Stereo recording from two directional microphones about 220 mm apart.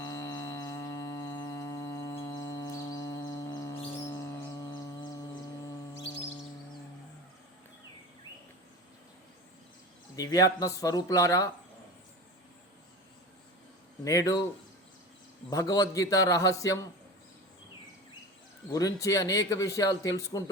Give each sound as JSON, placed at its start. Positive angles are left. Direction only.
{"t": 0.0, "sound": "a sound", "side_deg": 15}
{"t": 10.2, "sound": "speech", "side_deg": 15}
{"t": 14.0, "sound": "speech", "side_deg": 15}
{"t": 15.4, "sound": "speech", "side_deg": 15}
{"t": 18.7, "sound": "speech", "side_deg": 15}